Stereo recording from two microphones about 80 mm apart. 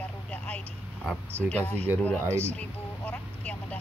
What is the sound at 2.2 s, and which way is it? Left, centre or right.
Speech, right.